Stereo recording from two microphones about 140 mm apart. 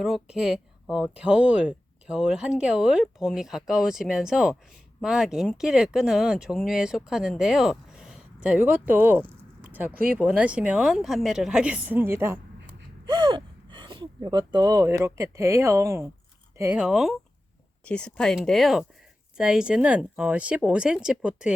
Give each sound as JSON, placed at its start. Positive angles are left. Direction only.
{"t": 0.0, "sound": "a woman's voice", "side_deg": -5}
{"t": 13.1, "sound": "gasp", "side_deg": -30}
{"t": 14.8, "sound": "speech", "side_deg": -20}
{"t": 16.7, "sound": "speech", "side_deg": -5}
{"t": 17.8, "sound": "a woman's voice", "side_deg": 10}